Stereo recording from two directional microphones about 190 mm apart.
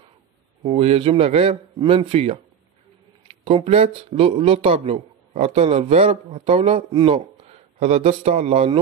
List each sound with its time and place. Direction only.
0.6 s speech: 30° right (ahead or behind)